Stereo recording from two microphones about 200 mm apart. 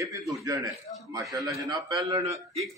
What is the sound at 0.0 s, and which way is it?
A man's voice, 15° right (ahead or behind).